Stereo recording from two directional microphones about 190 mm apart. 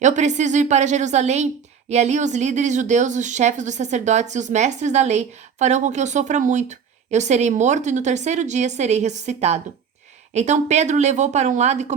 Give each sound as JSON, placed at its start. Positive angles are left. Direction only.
{"t": 0.0, "sound": "speech", "side_deg": -40}